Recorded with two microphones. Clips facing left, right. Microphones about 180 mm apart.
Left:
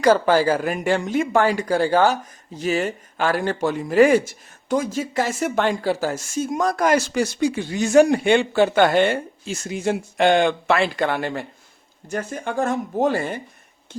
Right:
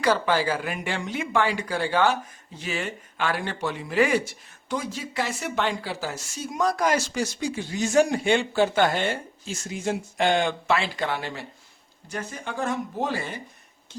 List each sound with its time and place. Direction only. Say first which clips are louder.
0.0 s speech: left 7 dB; 45° left (ahead or behind)